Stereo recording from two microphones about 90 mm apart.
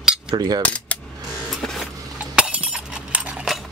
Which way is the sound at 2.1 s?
15° right (ahead or behind).